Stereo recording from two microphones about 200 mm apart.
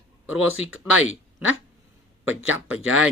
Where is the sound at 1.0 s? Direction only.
90° left.